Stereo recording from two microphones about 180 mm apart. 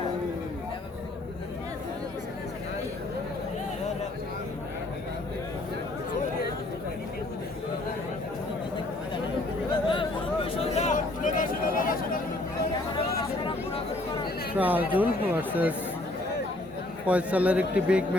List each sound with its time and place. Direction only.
9.9 s a sound: 30° left (ahead or behind); by 12.2 s 50° left (ahead or behind)
14.6 s speech: 10° right (ahead or behind)
17.1 s speech: 5° right (ahead or behind)